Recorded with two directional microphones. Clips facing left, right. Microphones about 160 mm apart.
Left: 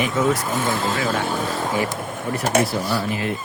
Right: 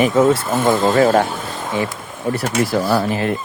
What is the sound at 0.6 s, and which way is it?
Speech, 40° right (ahead or behind).